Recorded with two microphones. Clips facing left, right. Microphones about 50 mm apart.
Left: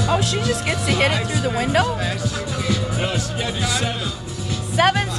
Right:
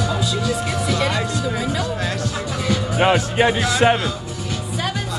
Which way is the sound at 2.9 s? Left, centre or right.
Right.